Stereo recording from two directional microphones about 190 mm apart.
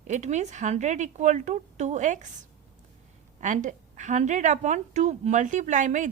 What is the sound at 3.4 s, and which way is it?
A woman's voice, 40° right (ahead or behind).